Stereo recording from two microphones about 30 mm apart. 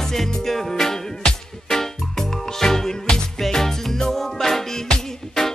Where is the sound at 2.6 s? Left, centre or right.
Centre.